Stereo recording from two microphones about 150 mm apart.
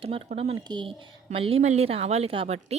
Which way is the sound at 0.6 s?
30° right (ahead or behind).